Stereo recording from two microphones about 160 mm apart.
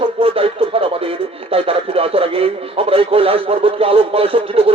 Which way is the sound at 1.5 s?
35° right (ahead or behind).